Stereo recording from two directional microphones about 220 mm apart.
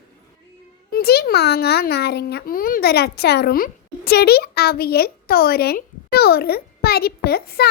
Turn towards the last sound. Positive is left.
turn(degrees=45)  # may be behind; listen again after turning